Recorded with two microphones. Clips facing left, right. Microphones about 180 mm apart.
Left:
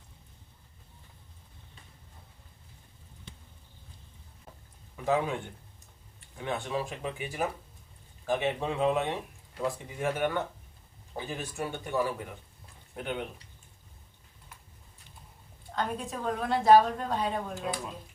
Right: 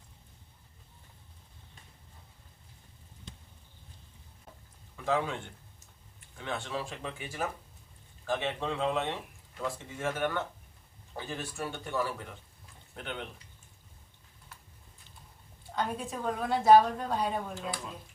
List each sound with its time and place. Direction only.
4.9 s speech: 15° left (ahead or behind)
15.7 s a woman's voice: centre (ahead or behind)